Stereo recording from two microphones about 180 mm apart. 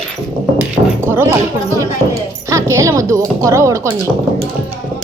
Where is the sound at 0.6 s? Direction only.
10° right (ahead or behind).